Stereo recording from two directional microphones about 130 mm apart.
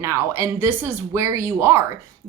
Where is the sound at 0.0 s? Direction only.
20° right (ahead or behind).